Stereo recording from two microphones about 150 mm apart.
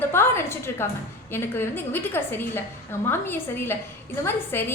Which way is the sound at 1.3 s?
15° left (ahead or behind).